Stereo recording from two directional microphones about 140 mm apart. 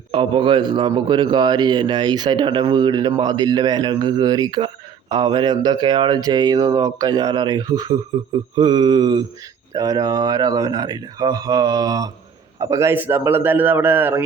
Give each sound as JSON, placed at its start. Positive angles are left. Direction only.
{"t": 0.1, "sound": "a man's voice", "side_deg": -35}